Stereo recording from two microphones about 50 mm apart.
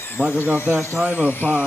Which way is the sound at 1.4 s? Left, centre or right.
Left.